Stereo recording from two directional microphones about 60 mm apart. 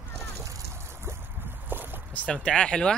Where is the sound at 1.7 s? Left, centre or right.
Right.